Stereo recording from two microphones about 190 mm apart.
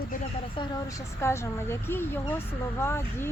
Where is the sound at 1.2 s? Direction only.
15° left (ahead or behind).